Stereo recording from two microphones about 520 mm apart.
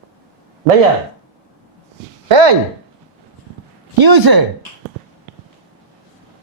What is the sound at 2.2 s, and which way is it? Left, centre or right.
Speech, right.